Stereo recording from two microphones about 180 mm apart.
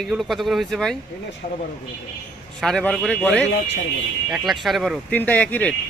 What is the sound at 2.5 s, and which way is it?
Speech, centre (ahead or behind).